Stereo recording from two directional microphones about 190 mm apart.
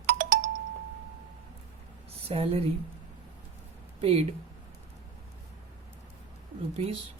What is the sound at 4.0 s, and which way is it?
Speech, 30° right (ahead or behind).